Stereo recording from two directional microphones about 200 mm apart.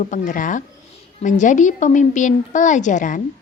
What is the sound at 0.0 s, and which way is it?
A woman's voice, 40° left (ahead or behind).